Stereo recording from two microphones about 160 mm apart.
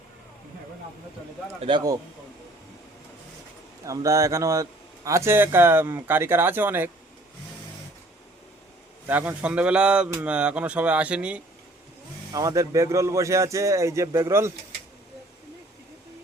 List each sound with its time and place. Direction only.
1.6 s speech: 25° right (ahead or behind)
3.8 s speech: 20° right (ahead or behind)
9.0 s speech: 10° right (ahead or behind)
12.3 s speech: 20° right (ahead or behind)